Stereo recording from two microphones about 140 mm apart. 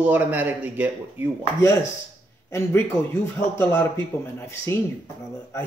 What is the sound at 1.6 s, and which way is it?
Speech, 20° left (ahead or behind).